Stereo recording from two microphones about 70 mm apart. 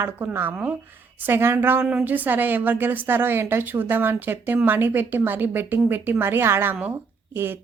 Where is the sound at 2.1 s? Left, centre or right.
Right.